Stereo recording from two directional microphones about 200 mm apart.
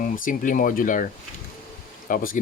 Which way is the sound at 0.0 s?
40° left (ahead or behind).